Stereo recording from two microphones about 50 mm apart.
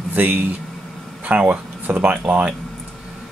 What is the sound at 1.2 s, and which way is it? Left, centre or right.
Speech, right.